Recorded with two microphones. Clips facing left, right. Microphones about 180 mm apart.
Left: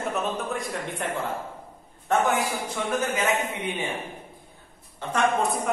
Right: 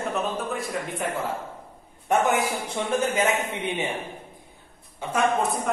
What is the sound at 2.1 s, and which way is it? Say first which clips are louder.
Speech: right 1 dB; 15° right (ahead or behind).